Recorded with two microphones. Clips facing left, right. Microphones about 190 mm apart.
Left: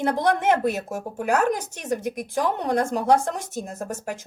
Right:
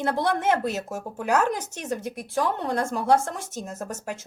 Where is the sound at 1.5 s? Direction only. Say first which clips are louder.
Left 3 dB; 10° left (ahead or behind).